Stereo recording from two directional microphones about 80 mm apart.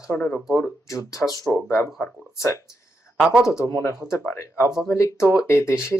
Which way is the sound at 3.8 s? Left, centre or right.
Left.